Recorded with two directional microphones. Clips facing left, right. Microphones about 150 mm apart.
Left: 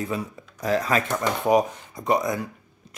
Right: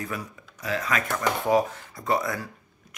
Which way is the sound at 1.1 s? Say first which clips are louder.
Left 1 dB; 20° left (ahead or behind).